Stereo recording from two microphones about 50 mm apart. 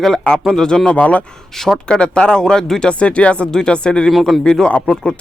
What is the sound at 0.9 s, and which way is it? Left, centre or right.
Speech, left.